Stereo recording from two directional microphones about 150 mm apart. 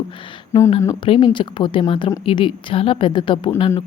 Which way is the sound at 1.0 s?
35° left (ahead or behind).